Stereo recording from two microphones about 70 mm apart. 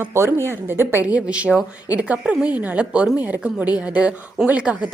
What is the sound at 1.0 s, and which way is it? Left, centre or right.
A woman's voice, centre.